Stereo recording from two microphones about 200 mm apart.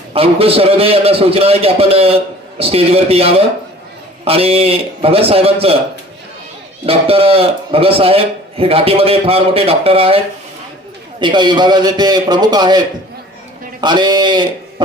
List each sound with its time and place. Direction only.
0.1 s a man's voice: 30° right (ahead or behind)
6.8 s a man's voice: 30° right (ahead or behind)
11.2 s a man's voice: 25° right (ahead or behind)
13.8 s a man's voice: 20° right (ahead or behind)